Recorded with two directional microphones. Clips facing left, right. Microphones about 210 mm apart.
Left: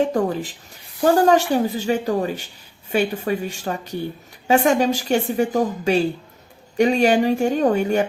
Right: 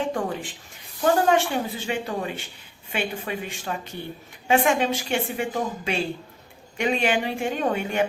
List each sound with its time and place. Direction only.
0.0 s a woman's voice: 40° left (ahead or behind)